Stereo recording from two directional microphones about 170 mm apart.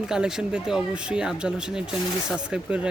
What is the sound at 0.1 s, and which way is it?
Speech, 5° right (ahead or behind).